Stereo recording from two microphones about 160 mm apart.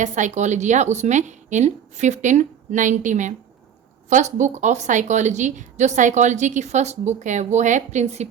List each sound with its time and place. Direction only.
0.0 s a woman's voice: 50° right (ahead or behind)